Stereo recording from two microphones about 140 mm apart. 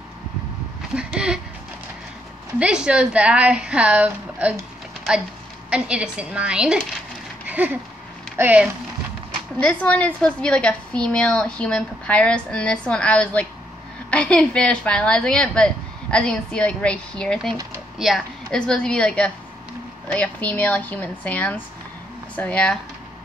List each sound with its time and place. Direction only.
0.9 s a woman's voice: 5° right (ahead or behind)
2.6 s a woman's voice: 5° right (ahead or behind)
5.7 s a woman's voice: 5° right (ahead or behind)
7.4 s a sound: 10° right (ahead or behind)
8.4 s a woman's voice: 10° right (ahead or behind)
9.6 s a woman's voice: 10° left (ahead or behind)